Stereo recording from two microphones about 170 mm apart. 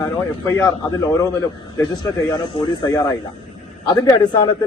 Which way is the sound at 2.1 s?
15° left (ahead or behind).